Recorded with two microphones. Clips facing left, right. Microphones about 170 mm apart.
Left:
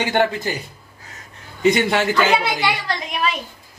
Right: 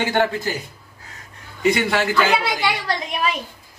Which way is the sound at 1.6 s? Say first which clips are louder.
Left 2 dB; 20° left (ahead or behind).